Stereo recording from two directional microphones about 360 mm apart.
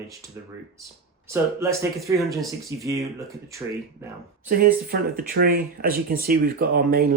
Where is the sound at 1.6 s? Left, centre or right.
Centre.